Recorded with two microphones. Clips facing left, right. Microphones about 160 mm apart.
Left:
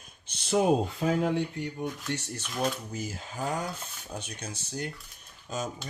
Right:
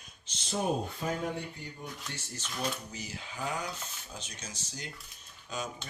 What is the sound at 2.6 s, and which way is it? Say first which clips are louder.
Speech: left 6 dB; 50° left (ahead or behind).